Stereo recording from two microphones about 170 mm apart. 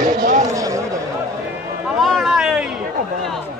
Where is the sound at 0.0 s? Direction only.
50° right (ahead or behind).